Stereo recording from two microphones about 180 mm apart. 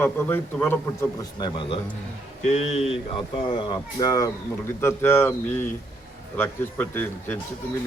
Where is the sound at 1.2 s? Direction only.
25° left (ahead or behind).